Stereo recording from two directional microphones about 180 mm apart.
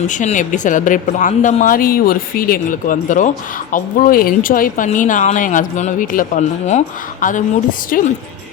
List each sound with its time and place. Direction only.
0.1 s a woman's voice: 45° left (ahead or behind)